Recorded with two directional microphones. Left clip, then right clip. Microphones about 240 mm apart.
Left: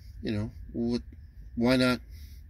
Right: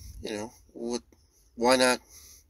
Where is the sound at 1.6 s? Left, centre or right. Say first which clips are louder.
Right 3 dB; right.